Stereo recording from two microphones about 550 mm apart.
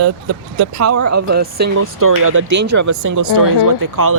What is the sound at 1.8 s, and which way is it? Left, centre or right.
Speech, right.